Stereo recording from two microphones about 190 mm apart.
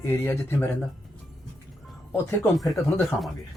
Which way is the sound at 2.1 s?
15° left (ahead or behind).